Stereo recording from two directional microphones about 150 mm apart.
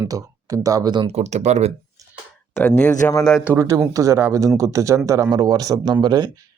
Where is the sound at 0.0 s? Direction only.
20° right (ahead or behind).